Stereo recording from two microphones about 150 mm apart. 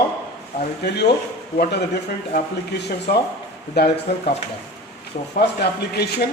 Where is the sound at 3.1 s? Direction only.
90° left.